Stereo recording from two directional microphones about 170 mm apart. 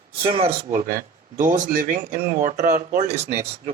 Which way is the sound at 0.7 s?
50° right (ahead or behind).